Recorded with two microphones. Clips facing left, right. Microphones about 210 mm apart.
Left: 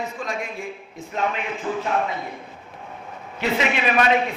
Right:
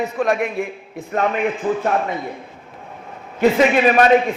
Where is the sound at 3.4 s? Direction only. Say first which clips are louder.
Right 9 dB; 50° right (ahead or behind).